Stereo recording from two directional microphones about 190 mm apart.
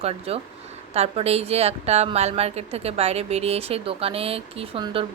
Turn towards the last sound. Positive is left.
turn(degrees=-25)  # may be behind; listen again after turning